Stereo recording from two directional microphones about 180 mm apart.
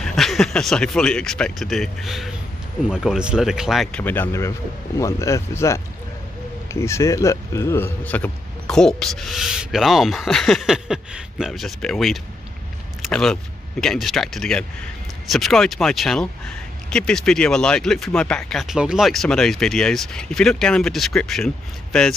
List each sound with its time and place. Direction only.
0.0 s speech: centre (ahead or behind)
4.0 s speech: 10° left (ahead or behind)